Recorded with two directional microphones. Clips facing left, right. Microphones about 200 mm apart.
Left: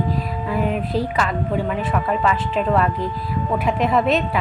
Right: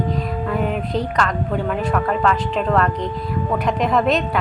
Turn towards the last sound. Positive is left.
turn(degrees=5)  # may be behind; listen again after turning